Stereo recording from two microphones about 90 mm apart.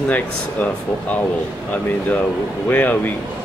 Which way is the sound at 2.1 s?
20° left (ahead or behind).